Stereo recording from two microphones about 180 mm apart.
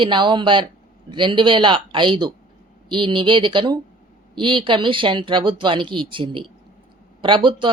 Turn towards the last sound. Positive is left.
turn(degrees=-25)  # may be behind; listen again after turning